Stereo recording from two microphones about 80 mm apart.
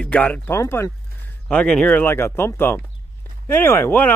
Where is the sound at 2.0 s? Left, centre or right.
Left.